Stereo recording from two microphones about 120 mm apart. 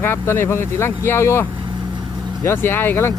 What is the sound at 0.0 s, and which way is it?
Speech, 20° left (ahead or behind).